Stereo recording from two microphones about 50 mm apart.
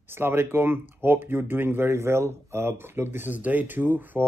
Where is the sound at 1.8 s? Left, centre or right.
Right.